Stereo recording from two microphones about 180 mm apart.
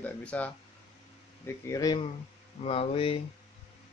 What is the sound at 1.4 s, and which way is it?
Speech, 20° left (ahead or behind).